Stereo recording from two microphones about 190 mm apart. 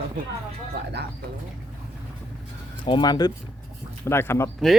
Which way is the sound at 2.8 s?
25° left (ahead or behind).